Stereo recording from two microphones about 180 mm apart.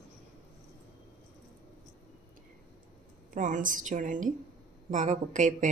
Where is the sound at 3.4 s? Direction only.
45° right (ahead or behind).